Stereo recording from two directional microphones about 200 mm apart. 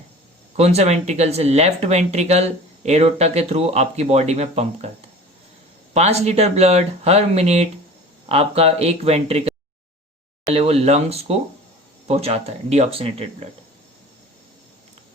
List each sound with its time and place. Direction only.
0.5 s speech: 35° right (ahead or behind)
5.9 s speech: 35° right (ahead or behind)